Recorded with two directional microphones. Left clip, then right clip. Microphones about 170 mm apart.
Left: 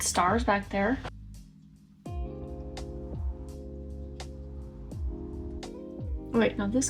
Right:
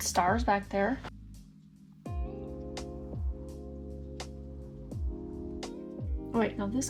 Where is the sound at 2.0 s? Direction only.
Centre (ahead or behind).